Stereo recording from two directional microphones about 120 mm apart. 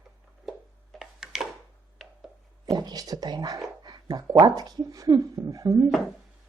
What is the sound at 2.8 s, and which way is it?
A woman's voice, 30° right (ahead or behind).